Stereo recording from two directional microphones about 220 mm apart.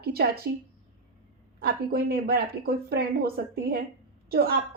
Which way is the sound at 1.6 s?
45° right (ahead or behind).